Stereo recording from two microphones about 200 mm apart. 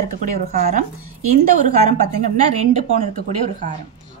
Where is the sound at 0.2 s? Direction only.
40° right (ahead or behind).